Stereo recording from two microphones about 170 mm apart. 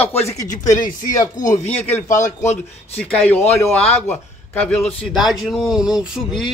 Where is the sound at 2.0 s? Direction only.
50° left (ahead or behind).